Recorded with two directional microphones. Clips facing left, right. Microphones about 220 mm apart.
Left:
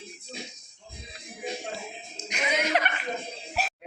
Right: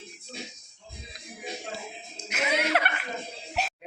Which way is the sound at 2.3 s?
5° right (ahead or behind).